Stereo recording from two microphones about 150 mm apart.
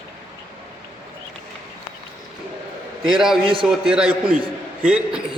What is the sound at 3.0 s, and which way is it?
A man's voice, centre (ahead or behind).